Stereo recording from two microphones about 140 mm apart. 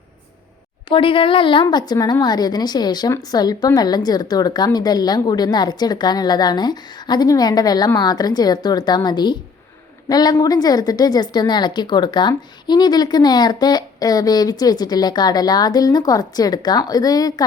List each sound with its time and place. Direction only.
0.9 s a woman's voice: 40° left (ahead or behind)